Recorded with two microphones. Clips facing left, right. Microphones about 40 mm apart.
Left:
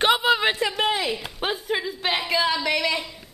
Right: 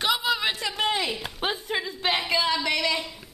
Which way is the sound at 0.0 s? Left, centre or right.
Left.